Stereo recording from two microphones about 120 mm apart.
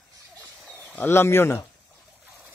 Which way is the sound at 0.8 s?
15° left (ahead or behind).